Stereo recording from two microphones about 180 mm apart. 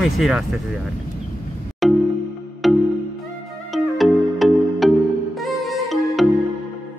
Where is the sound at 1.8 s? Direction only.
Centre (ahead or behind).